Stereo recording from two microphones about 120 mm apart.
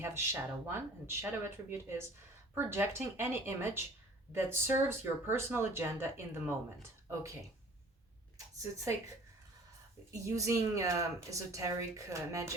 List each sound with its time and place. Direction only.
0.0 s speech: 20° right (ahead or behind)
10.1 s speech: 25° right (ahead or behind)